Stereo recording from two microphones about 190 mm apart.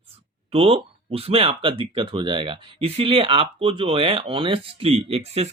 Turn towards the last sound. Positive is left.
turn(degrees=-35)  # may be behind; listen again after turning